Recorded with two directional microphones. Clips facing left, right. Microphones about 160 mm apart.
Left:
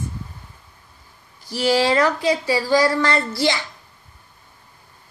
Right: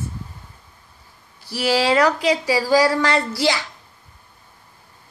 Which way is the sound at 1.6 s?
10° right (ahead or behind).